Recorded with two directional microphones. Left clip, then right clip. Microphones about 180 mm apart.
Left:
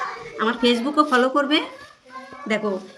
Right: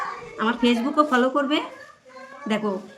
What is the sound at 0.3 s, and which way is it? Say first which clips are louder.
Speech: left 2 dB; 10° right (ahead or behind).